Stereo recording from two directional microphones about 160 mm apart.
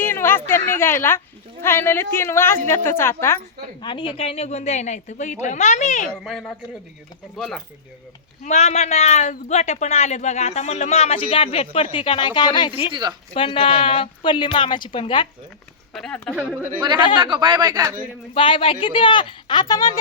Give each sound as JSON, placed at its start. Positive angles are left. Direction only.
{"t": 0.0, "sound": "a sound", "side_deg": 15}
{"t": 1.6, "sound": "speech", "side_deg": 15}
{"t": 3.8, "sound": "speech", "side_deg": 30}
{"t": 6.1, "sound": "speech", "side_deg": 0}
{"t": 8.4, "sound": "speech", "side_deg": 45}
{"t": 12.9, "sound": "speech", "side_deg": -25}
{"t": 13.3, "sound": "a woman's voice", "side_deg": 35}
{"t": 15.9, "sound": "speech", "side_deg": 5}
{"t": 16.3, "sound": "speech", "side_deg": -5}
{"t": 16.8, "sound": "speech", "side_deg": -25}
{"t": 18.3, "sound": "a woman's voice", "side_deg": 35}